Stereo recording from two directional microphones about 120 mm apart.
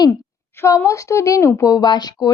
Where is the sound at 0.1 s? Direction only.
20° left (ahead or behind).